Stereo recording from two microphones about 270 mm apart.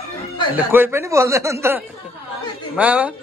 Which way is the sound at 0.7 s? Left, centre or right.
Centre.